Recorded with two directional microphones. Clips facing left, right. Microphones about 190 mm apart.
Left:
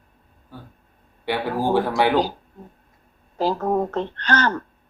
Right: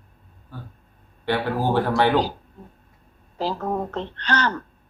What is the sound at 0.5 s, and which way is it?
A man's voice, 15° left (ahead or behind).